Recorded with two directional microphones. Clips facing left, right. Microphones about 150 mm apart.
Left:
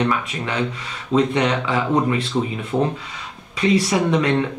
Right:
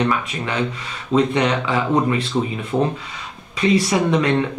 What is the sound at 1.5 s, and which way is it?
Speech, 25° right (ahead or behind).